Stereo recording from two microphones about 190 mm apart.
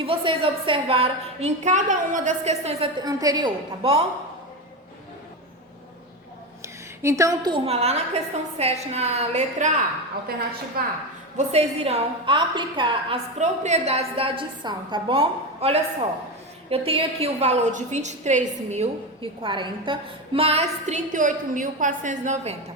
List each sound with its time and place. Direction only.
0.0 s a woman's voice: 30° right (ahead or behind)
3.0 s a woman's voice: 20° right (ahead or behind)
6.6 s a woman's voice: 15° right (ahead or behind); by 9.7 s 40° right (ahead or behind)
10.8 s a woman's voice: 50° right (ahead or behind)
11.3 s a woman's voice: 35° right (ahead or behind)
13.4 s a woman's voice: 35° right (ahead or behind)